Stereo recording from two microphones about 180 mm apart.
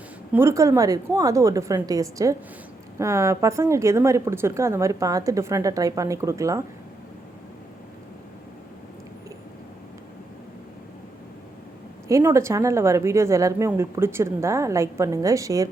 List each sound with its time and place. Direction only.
0.3 s a woman's voice: 15° right (ahead or behind)
12.0 s a woman's voice: 15° right (ahead or behind)